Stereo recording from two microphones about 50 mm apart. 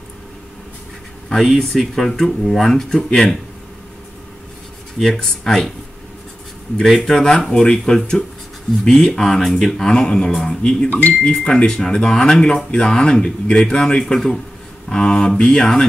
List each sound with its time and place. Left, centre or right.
1.3 s speech: centre
4.9 s speech: centre
7.1 s speech: centre
10.9 s speech: left
11.4 s speech: centre